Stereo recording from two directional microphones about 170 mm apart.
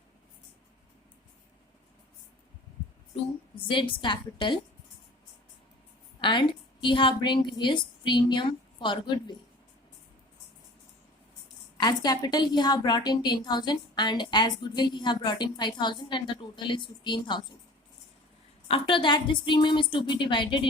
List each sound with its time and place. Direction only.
3.7 s a woman's voice: 30° left (ahead or behind)
6.8 s a woman's voice: 30° left (ahead or behind)
11.8 s a woman's voice: 25° left (ahead or behind)
18.7 s a woman's voice: 30° left (ahead or behind)